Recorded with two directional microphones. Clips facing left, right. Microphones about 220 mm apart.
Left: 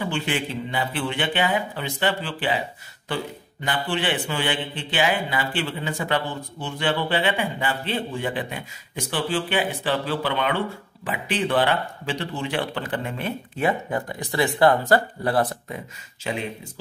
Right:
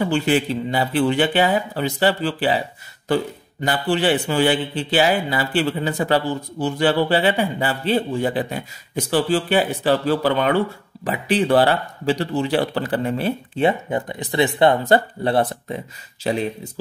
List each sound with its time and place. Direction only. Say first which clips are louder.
0.0 s a man's voice: right 8 dB; 40° right (ahead or behind)
3.6 s a man's voice: right 6 dB; 40° right (ahead or behind)
16.3 s a man's voice: right 6 dB; 35° right (ahead or behind)